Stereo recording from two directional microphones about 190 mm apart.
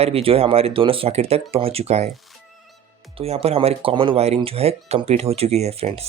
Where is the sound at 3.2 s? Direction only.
30° right (ahead or behind).